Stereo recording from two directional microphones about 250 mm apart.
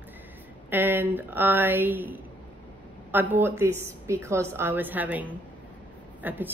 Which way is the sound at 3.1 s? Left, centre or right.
Centre.